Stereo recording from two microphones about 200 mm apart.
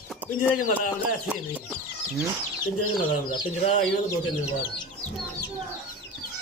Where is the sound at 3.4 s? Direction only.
25° left (ahead or behind).